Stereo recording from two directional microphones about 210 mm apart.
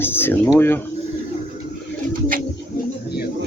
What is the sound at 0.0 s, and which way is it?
Speech, 10° left (ahead or behind).